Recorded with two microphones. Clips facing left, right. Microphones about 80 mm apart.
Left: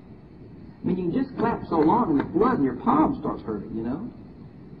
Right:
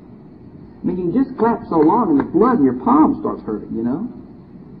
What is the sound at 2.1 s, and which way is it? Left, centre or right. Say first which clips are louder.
Speech: right 7 dB; right.